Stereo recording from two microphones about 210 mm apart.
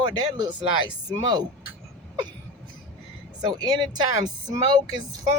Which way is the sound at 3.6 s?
20° right (ahead or behind).